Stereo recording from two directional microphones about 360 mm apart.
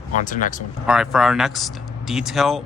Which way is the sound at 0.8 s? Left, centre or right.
Centre.